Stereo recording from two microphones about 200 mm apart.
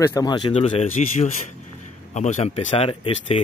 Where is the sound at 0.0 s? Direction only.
20° left (ahead or behind).